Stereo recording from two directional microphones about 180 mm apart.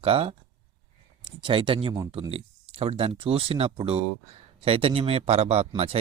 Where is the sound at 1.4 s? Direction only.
30° right (ahead or behind).